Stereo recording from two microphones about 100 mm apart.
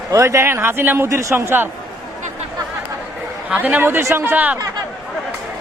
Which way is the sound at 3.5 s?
15° right (ahead or behind).